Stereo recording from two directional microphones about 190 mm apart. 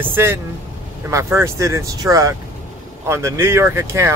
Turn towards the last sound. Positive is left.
turn(degrees=-15)  # may be behind; listen again after turning